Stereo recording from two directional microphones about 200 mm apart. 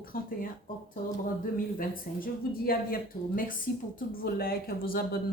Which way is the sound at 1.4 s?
45° left (ahead or behind).